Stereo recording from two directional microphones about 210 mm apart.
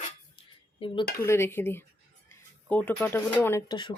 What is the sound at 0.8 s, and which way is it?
Cutlery, 25° left (ahead or behind).